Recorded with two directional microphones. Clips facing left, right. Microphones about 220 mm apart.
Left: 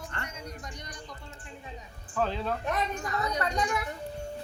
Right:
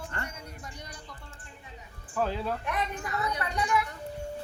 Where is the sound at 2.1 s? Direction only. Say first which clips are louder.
Even; 10° right (ahead or behind).